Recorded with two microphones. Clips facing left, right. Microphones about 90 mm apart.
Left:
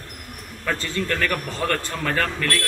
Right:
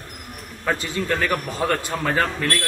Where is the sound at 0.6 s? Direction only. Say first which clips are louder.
Right 2 dB; 15° right (ahead or behind).